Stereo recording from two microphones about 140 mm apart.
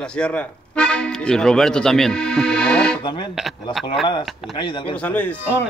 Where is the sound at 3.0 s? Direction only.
35° left (ahead or behind).